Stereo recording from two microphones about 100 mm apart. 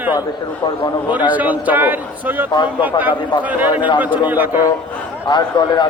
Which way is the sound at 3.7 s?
50° left (ahead or behind).